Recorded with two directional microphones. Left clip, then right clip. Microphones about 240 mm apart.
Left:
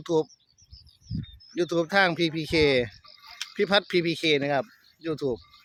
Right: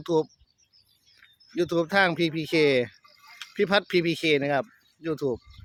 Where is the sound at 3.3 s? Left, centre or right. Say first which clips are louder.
Left 5 dB; left.